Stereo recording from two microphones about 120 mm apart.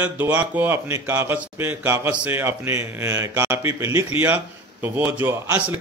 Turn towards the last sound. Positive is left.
turn(degrees=-15)  # may be behind; listen again after turning